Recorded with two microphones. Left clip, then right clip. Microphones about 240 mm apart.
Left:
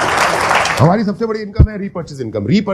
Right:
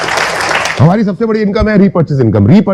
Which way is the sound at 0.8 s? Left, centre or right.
Right.